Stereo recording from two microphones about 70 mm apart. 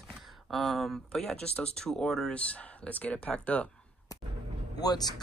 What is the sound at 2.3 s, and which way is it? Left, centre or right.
Speech, centre.